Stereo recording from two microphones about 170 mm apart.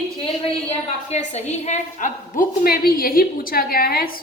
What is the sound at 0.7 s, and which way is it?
A woman's voice, 40° left (ahead or behind).